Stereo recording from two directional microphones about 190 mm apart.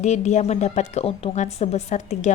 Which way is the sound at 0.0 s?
35° left (ahead or behind).